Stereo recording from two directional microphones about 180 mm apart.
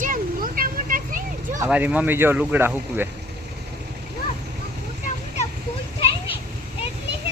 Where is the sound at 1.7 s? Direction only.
10° right (ahead or behind).